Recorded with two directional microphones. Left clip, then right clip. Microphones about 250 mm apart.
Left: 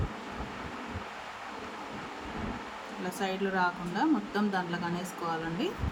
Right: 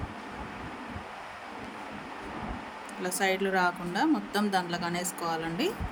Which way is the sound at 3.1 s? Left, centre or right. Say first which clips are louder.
Right 4 dB; right.